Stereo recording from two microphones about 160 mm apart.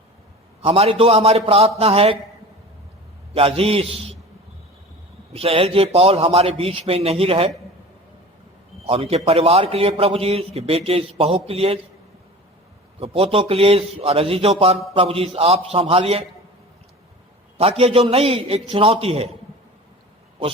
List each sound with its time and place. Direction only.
0.6 s a man's voice: 35° right (ahead or behind)
3.3 s a man's voice: 35° right (ahead or behind)
5.3 s a man's voice: 35° right (ahead or behind)
8.8 s a man's voice: 40° right (ahead or behind)
13.0 s a man's voice: 35° right (ahead or behind)
17.6 s a man's voice: 40° right (ahead or behind)